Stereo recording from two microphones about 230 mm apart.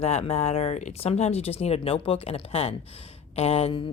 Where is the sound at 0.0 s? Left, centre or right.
Left.